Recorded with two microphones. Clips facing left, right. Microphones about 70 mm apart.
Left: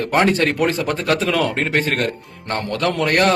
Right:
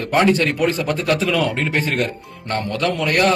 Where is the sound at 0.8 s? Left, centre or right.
Left.